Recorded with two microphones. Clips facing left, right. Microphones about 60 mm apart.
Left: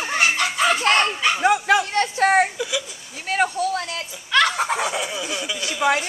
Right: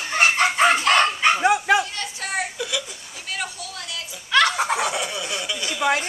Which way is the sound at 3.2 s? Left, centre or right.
Left.